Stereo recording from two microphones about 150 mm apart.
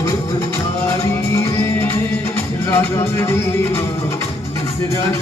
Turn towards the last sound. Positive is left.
turn(degrees=15)  # may be behind; listen again after turning